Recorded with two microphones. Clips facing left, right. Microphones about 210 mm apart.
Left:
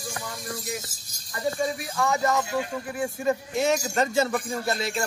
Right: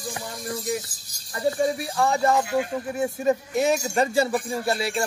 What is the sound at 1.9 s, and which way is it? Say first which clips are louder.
Speech: right 1 dB; 30° right (ahead or behind).